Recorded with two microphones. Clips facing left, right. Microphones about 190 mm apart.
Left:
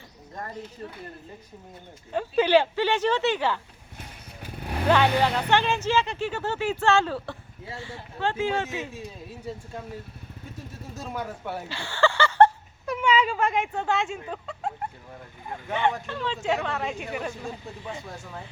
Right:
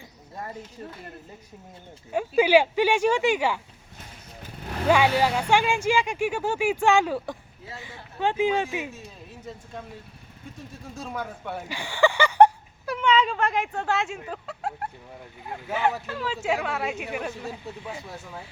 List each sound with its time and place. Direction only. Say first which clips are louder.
2.1 s speech: right 1 dB; 10° right (ahead or behind)
4.9 s speech: right 1 dB; 10° right (ahead or behind)
10.9 s speech: even; centre (ahead or behind)
11.7 s a sound: right 2 dB; 15° right (ahead or behind)
13.0 s speech: right 1 dB; 10° left (ahead or behind)